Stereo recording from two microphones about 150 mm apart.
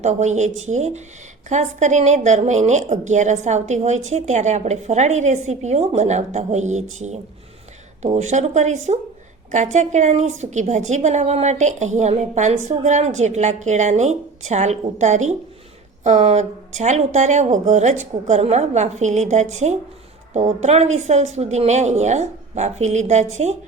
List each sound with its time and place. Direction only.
0.0 s a woman's voice: 50° right (ahead or behind)